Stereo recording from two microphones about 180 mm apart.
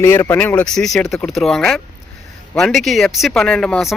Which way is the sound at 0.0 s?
15° left (ahead or behind).